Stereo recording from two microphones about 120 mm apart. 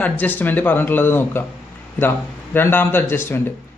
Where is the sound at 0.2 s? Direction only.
15° left (ahead or behind).